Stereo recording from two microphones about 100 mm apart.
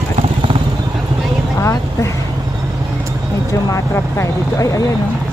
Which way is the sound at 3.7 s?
30° left (ahead or behind).